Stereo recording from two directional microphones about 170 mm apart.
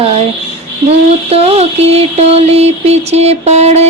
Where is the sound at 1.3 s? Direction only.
35° right (ahead or behind).